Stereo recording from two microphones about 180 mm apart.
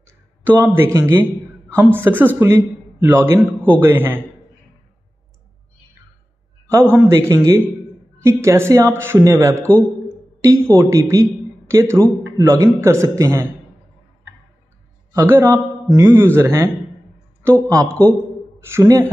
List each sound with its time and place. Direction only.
0.0 s a man's voice: 10° right (ahead or behind)
6.7 s a man's voice: 15° right (ahead or behind)
15.1 s a man's voice: 15° right (ahead or behind)